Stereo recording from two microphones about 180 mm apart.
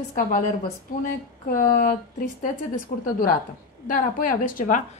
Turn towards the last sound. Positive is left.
turn(degrees=50)  # may be behind; listen again after turning